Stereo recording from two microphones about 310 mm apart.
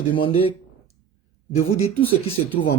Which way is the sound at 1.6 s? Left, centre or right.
Centre.